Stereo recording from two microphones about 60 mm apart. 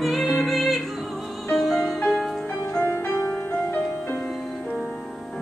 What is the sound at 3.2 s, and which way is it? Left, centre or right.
Music, left.